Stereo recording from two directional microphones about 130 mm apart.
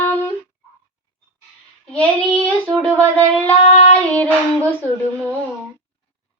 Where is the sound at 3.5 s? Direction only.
50° left (ahead or behind).